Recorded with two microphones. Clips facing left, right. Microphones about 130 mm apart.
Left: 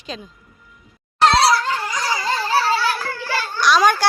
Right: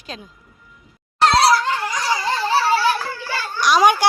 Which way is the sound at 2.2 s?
20° right (ahead or behind).